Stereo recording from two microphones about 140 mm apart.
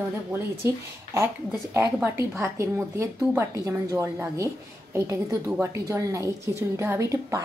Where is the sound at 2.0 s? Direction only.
15° right (ahead or behind).